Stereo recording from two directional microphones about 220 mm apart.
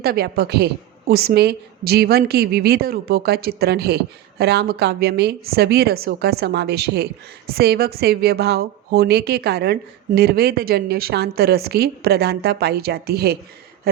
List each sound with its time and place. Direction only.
0.0 s a woman's voice: 45° right (ahead or behind)